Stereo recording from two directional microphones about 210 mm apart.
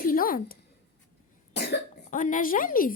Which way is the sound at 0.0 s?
40° left (ahead or behind).